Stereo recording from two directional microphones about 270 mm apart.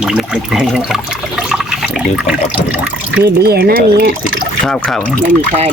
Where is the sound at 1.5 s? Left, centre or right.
Centre.